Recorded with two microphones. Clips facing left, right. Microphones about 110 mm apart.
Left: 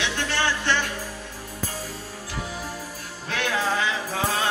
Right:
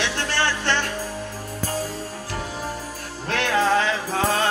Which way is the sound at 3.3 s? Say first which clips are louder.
Right 5 dB; 45° right (ahead or behind).